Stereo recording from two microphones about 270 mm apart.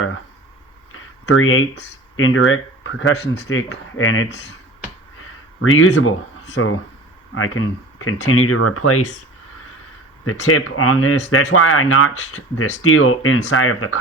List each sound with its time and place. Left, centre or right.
0.9 s speech: left
5.7 s speech: left
10.2 s speech: left